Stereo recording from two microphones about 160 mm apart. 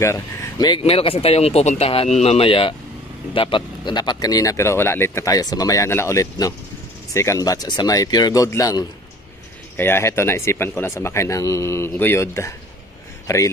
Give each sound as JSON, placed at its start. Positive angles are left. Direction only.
{"t": 0.0, "sound": "speech", "side_deg": 20}